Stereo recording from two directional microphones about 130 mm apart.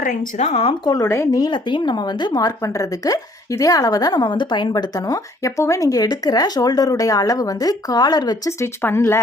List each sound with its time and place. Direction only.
0.0 s speech: 75° left (ahead or behind); by 0.7 s 55° left (ahead or behind)
0.7 s speech: 30° left (ahead or behind)